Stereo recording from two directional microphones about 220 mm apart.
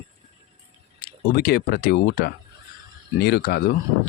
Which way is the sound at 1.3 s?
45° left (ahead or behind).